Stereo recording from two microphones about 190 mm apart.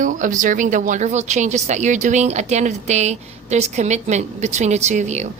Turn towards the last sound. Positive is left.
turn(degrees=-40)  # may be behind; listen again after turning